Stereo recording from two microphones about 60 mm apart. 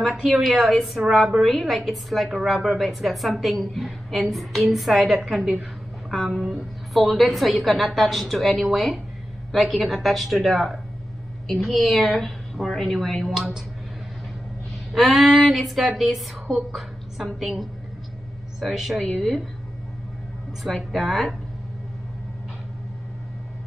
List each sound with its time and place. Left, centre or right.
0.0 s a woman's voice: centre
13.4 s speech: centre
14.9 s a woman's voice: centre
20.6 s a woman's voice: centre